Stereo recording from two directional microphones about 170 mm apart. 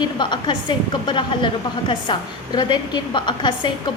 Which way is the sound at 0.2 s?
25° left (ahead or behind).